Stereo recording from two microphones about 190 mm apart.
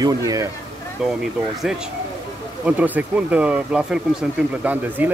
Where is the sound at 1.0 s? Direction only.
Centre (ahead or behind).